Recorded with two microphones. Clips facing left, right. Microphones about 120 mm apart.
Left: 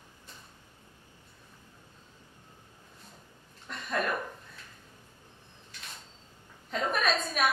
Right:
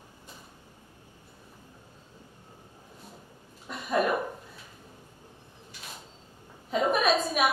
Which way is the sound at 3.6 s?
5° right (ahead or behind).